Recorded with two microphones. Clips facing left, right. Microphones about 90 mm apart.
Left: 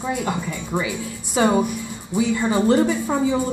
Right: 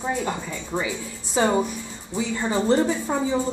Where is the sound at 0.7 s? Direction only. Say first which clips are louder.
Left 2 dB; 65° left (ahead or behind).